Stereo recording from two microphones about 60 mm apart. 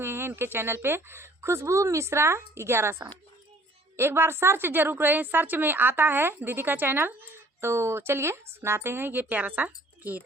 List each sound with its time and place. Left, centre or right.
0.0 s a woman's voice: right